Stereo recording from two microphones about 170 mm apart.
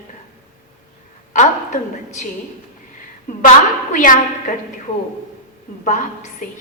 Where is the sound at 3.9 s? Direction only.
50° left (ahead or behind).